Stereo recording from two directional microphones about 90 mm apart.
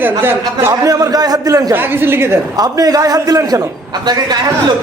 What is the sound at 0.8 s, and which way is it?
Speech, 40° right (ahead or behind).